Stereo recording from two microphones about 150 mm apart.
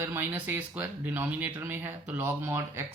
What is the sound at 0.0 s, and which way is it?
Speech, 15° right (ahead or behind).